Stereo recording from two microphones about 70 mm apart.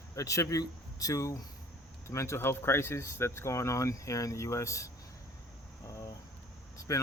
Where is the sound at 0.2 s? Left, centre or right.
Left.